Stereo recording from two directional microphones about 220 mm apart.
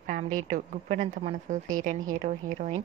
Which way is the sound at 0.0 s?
35° right (ahead or behind).